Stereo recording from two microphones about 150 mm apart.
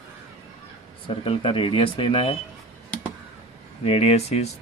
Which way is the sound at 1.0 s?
35° left (ahead or behind).